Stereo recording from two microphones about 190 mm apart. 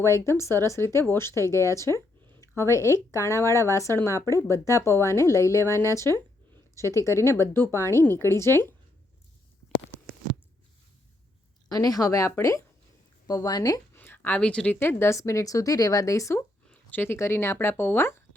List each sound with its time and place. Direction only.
0.0 s speech: 15° left (ahead or behind)
1.6 s a sound: 15° left (ahead or behind)
2.6 s speech: 15° left (ahead or behind)
11.7 s a woman's voice: 20° left (ahead or behind)